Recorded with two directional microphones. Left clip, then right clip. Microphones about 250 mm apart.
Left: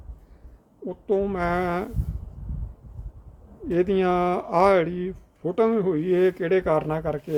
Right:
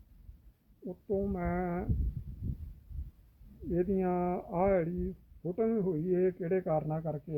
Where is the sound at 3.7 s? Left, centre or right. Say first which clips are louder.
Left 10 dB; centre.